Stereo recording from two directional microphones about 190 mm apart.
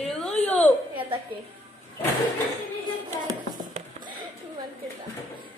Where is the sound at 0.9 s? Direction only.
25° right (ahead or behind).